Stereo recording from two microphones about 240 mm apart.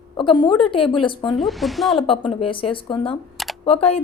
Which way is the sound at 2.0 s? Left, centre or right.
Left.